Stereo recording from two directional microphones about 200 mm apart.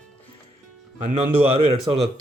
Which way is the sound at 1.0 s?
25° right (ahead or behind).